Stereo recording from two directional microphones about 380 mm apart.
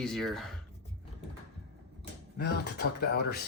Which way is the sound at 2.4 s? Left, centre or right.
Left.